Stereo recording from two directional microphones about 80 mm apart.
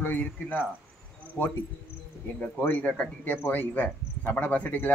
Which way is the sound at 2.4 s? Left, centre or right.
Centre.